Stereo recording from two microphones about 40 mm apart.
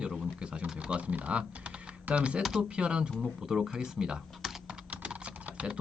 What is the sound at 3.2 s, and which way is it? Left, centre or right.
A man's voice, centre.